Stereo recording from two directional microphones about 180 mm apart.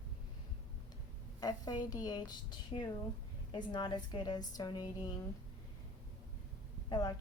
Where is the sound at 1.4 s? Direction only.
20° left (ahead or behind).